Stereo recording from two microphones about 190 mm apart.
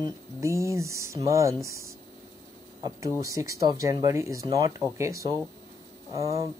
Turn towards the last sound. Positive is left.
turn(degrees=-15)  # may be behind; listen again after turning